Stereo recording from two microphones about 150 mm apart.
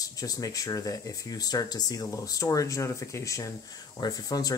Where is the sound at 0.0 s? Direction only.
25° left (ahead or behind).